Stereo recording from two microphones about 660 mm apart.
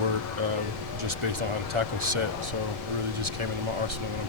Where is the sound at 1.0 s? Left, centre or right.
Right.